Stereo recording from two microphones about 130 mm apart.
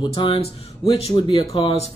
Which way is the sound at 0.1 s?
45° left (ahead or behind).